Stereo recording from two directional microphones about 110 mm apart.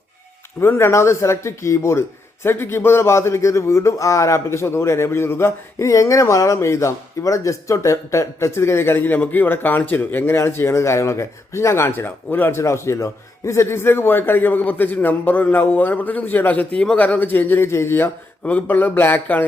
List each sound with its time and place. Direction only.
0.6 s speech: 20° left (ahead or behind)